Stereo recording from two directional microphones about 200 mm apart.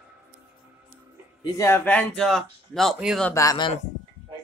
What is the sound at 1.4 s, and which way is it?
Speech, 15° left (ahead or behind).